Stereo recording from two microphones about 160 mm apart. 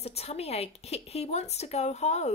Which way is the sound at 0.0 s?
40° left (ahead or behind).